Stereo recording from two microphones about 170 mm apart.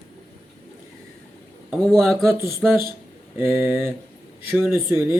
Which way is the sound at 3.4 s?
15° right (ahead or behind).